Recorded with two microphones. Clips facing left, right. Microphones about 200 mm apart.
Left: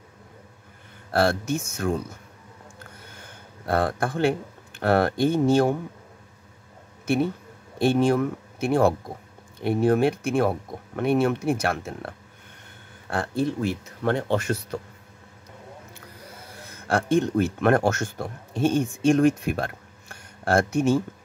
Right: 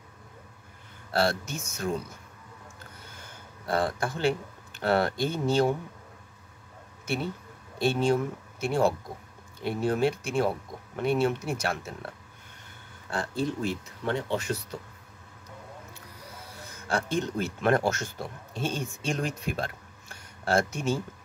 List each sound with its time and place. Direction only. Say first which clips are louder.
1.1 s speech: left 5 dB; 55° left (ahead or behind)
3.6 s speech: left 4 dB; 55° left (ahead or behind)
7.8 s speech: left 5 dB; 55° left (ahead or behind)
13.1 s speech: left 4 dB; 60° left (ahead or behind)
16.8 s speech: left 7 dB; 55° left (ahead or behind)